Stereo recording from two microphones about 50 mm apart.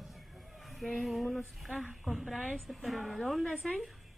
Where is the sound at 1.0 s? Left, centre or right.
Centre.